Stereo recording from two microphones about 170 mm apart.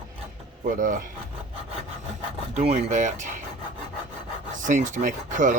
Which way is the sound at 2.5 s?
40° right (ahead or behind).